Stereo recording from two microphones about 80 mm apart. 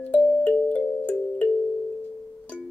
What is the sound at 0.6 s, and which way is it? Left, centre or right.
Music, centre.